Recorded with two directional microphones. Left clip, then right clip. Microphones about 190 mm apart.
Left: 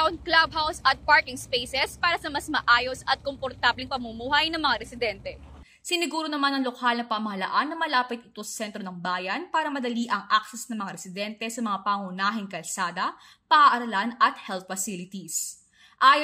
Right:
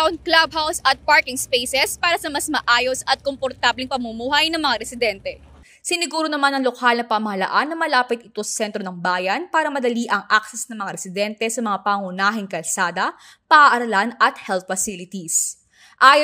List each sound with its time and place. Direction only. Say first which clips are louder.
0.0 s speech: right 5 dB; 60° right (ahead or behind)
5.9 s a woman's voice: right 6 dB; 40° right (ahead or behind)